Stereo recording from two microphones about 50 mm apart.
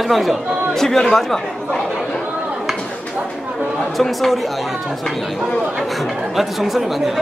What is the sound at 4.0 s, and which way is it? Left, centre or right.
Speech, centre.